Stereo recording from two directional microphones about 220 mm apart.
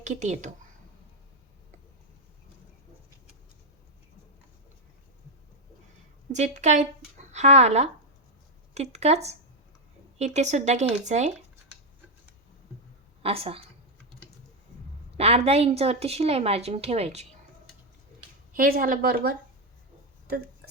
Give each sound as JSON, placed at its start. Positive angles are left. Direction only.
{"t": 0.0, "sound": "speech", "side_deg": -30}
{"t": 6.3, "sound": "a woman's voice", "side_deg": -30}
{"t": 13.2, "sound": "a woman's voice", "side_deg": -25}
{"t": 15.2, "sound": "a woman's voice", "side_deg": -30}
{"t": 18.5, "sound": "speech", "side_deg": -40}